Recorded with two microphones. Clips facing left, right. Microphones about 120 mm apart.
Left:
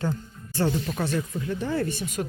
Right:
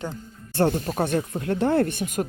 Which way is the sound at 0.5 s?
55° right (ahead or behind).